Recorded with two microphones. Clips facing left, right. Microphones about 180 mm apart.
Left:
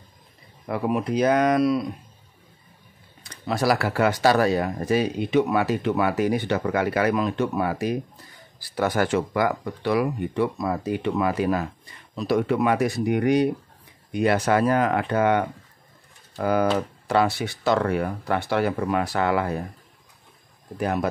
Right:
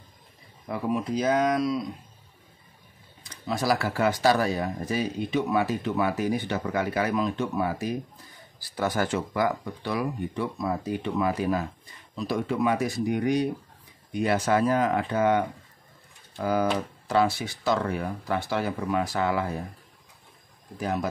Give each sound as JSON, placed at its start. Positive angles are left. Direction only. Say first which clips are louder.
{"t": 0.7, "sound": "speech", "louder": "left 3 dB", "side_deg": 70}
{"t": 3.3, "sound": "speech", "louder": "left 3 dB", "side_deg": 70}
{"t": 20.7, "sound": "speech", "louder": "left 4 dB", "side_deg": 65}